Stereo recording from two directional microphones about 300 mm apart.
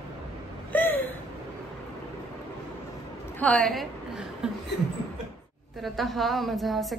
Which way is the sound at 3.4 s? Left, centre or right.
Centre.